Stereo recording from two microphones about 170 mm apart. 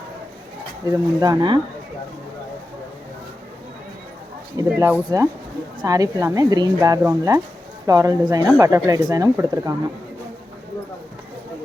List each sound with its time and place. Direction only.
0.9 s speech: 25° right (ahead or behind)
4.7 s speech: 10° right (ahead or behind)